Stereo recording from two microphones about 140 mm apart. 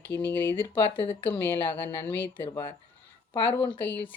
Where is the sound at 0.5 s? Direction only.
40° left (ahead or behind).